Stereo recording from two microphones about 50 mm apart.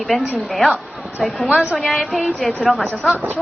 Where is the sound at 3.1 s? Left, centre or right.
Right.